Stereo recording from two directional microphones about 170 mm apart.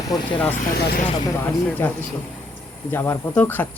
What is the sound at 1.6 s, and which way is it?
Speech, 10° left (ahead or behind).